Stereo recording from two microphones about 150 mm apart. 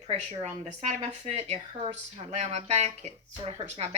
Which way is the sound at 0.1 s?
45° right (ahead or behind).